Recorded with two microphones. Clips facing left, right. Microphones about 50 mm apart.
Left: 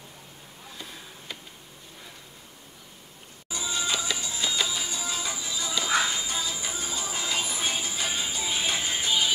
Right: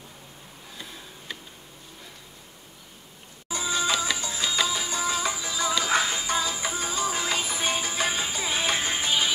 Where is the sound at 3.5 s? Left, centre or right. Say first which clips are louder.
Right 4 dB; right.